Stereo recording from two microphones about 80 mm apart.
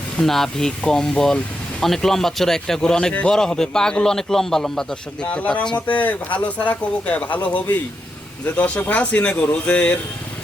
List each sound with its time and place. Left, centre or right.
0.2 s a man's voice: centre
5.3 s speech: centre